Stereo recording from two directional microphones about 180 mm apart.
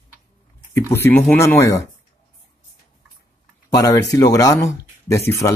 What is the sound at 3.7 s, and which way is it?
Speech, 20° left (ahead or behind).